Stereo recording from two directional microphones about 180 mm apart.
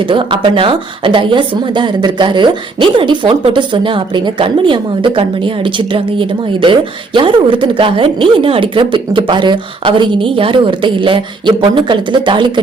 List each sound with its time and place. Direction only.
0.1 s a woman's voice: 25° right (ahead or behind)